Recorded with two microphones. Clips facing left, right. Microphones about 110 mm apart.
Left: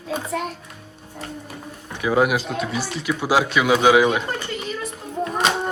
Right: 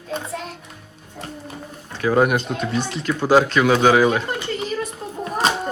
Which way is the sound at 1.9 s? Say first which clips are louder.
Right 2 dB; 15° left (ahead or behind).